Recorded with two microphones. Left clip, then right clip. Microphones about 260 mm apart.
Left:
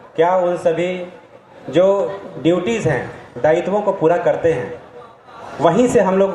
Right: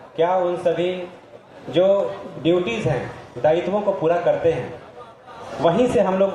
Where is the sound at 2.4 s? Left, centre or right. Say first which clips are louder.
Left 3 dB; left.